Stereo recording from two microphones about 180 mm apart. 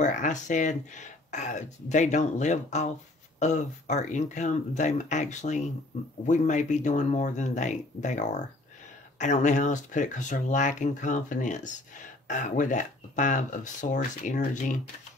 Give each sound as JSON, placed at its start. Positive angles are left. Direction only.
{"t": 0.0, "sound": "speech", "side_deg": 45}